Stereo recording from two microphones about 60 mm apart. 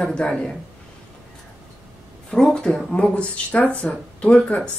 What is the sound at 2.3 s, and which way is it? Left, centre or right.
Speech, centre.